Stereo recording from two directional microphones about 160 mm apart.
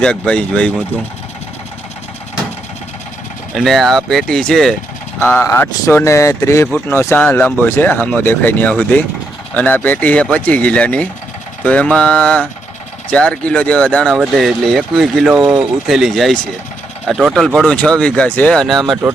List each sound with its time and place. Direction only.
0.0 s speech: 5° left (ahead or behind)
3.5 s speech: centre (ahead or behind)